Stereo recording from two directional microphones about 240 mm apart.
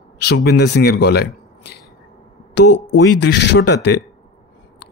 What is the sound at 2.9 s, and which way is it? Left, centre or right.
Speech, left.